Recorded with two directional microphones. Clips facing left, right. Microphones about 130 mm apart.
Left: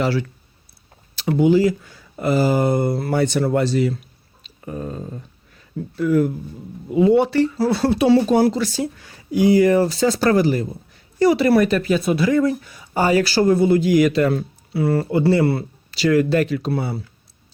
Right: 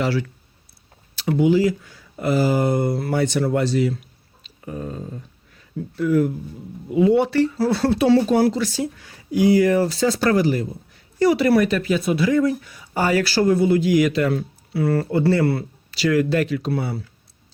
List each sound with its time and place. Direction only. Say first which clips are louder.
0.0 s speech: left 1 dB; 30° left (ahead or behind)
6.9 s speech: left 1 dB; 30° left (ahead or behind)
8.5 s speech: left 1 dB; 35° left (ahead or behind)
9.4 s speech: left 2 dB; 25° left (ahead or behind)
13.5 s speech: left 1 dB; 35° left (ahead or behind)
14.7 s speech: left 1 dB; 20° left (ahead or behind)